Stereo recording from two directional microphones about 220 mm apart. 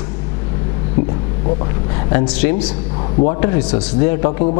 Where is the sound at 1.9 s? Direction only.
10° left (ahead or behind).